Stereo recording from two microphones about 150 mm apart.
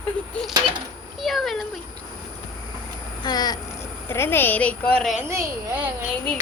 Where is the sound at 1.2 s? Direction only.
Centre (ahead or behind).